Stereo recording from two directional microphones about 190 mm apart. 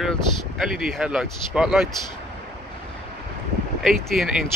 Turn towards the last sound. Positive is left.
turn(degrees=0)  # may be behind; listen again after turning